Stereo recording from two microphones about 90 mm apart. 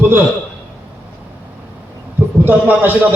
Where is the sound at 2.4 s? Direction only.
20° right (ahead or behind).